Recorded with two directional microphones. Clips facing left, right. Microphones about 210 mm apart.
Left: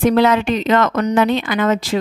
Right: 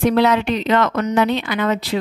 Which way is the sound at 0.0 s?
50° left (ahead or behind).